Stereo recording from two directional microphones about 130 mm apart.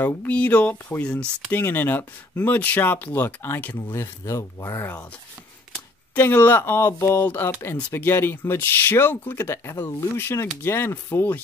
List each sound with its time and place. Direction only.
0.0 s speech: 10° left (ahead or behind)
6.1 s speech: 15° left (ahead or behind)